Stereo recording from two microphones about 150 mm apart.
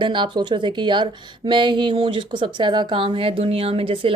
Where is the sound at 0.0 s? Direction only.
30° right (ahead or behind).